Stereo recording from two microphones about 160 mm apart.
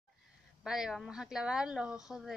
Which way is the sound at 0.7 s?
5° right (ahead or behind).